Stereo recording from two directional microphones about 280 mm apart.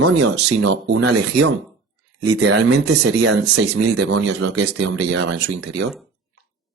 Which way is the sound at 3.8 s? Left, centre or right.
Right.